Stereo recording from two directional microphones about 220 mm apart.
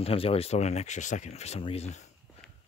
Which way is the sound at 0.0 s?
25° left (ahead or behind).